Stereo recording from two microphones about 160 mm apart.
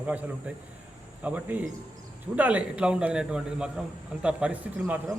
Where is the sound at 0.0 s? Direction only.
10° right (ahead or behind).